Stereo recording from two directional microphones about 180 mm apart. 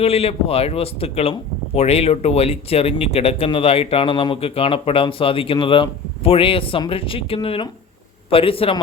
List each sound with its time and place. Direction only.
0.0 s speech: 35° left (ahead or behind)